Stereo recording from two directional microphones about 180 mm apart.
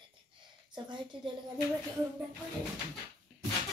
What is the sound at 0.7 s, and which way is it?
Speech, 25° right (ahead or behind).